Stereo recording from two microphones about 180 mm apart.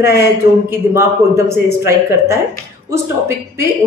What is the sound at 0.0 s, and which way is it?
A man's voice, 15° right (ahead or behind).